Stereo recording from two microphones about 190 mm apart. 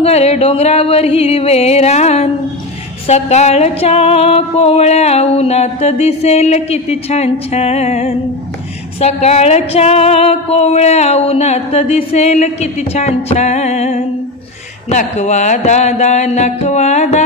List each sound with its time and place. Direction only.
0.0 s music: 30° left (ahead or behind)